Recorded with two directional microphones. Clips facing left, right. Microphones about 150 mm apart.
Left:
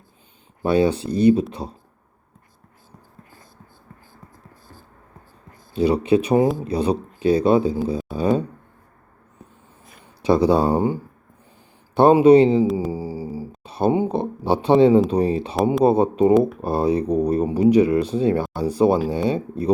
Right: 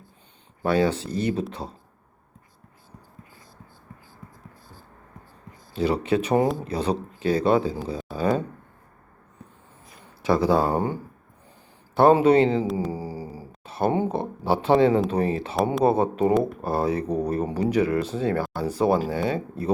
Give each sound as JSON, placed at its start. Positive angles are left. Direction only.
{"t": 0.6, "sound": "speech", "side_deg": 15}
{"t": 5.7, "sound": "speech", "side_deg": 15}
{"t": 9.8, "sound": "a sound", "side_deg": 20}
{"t": 11.9, "sound": "speech", "side_deg": 15}
{"t": 12.7, "sound": "a sound", "side_deg": 10}
{"t": 13.5, "sound": "speech", "side_deg": 15}